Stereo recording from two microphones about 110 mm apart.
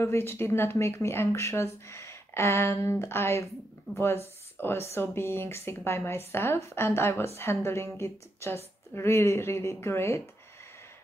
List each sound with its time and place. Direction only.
0.0 s speech: 20° left (ahead or behind)